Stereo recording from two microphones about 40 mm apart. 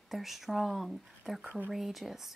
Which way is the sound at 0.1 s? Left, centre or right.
Centre.